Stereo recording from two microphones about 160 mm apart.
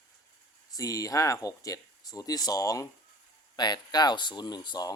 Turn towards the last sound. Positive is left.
turn(degrees=25)  # may be behind; listen again after turning